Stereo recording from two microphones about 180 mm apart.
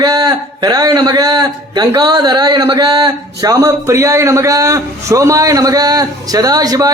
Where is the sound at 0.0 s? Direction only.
20° right (ahead or behind).